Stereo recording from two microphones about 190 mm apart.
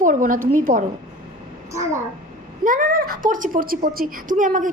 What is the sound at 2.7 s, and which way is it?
A woman's voice, 45° right (ahead or behind).